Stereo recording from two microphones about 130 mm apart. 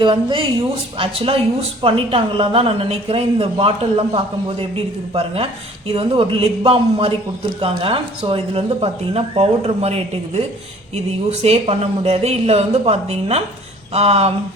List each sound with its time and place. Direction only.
0.0 s speech: 35° right (ahead or behind)